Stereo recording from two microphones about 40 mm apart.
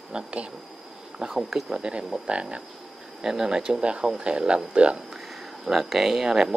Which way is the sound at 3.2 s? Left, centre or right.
Centre.